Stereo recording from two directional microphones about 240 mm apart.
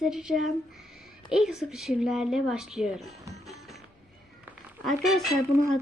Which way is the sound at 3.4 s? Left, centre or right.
Centre.